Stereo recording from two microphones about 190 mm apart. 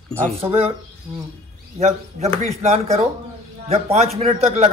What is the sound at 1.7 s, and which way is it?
Speech, 35° right (ahead or behind).